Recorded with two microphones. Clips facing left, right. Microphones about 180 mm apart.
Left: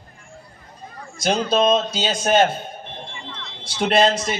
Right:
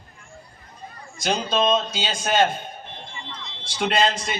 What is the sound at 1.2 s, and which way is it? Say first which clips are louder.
A man's voice: left 4 dB; 40° left (ahead or behind).